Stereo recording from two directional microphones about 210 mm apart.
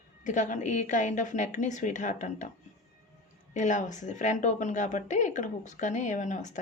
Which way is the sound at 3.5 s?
35° left (ahead or behind).